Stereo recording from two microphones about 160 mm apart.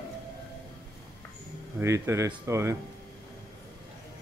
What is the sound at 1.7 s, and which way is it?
Speech, 15° right (ahead or behind).